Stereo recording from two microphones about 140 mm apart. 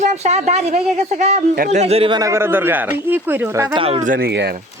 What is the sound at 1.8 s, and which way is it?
Speech, 45° right (ahead or behind).